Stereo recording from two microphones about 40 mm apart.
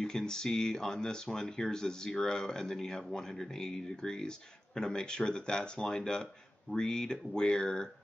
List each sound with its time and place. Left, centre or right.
0.0 s speech: centre